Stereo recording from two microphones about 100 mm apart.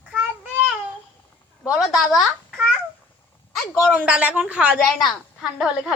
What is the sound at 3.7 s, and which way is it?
A woman's voice, 15° right (ahead or behind).